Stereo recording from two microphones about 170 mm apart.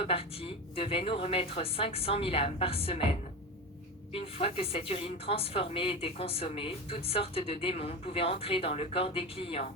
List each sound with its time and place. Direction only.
0.0 s speech: 35° left (ahead or behind)
4.1 s speech: 35° left (ahead or behind)